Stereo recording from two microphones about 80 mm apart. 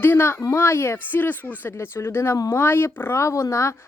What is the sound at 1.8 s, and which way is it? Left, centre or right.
Speech, left.